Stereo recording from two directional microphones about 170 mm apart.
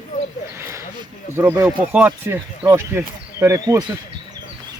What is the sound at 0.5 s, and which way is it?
Speech, 15° right (ahead or behind).